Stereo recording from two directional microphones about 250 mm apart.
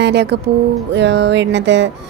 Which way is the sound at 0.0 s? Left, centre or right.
Right.